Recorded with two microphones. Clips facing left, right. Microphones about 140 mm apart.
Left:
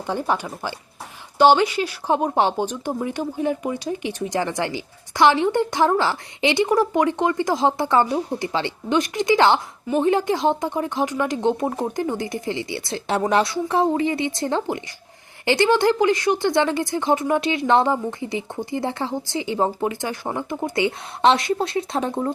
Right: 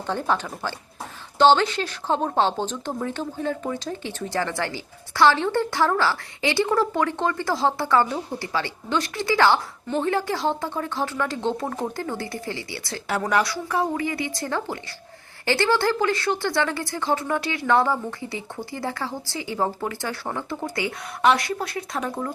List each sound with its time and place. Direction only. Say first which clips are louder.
0.1 s a woman's voice: left 1 dB; 10° left (ahead or behind)